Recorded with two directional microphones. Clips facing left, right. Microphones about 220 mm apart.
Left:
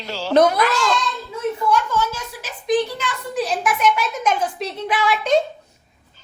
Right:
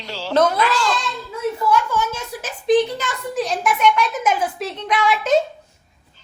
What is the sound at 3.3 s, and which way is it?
A woman's voice, centre (ahead or behind).